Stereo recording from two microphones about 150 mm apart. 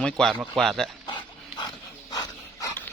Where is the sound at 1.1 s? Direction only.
30° left (ahead or behind).